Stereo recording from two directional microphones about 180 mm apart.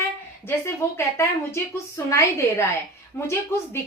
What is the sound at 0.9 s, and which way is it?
A woman's voice, 15° left (ahead or behind).